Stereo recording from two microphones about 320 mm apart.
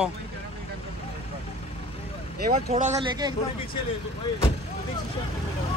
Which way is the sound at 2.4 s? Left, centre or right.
Right.